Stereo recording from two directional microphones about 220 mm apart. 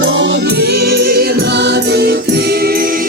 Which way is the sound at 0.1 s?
60° right (ahead or behind).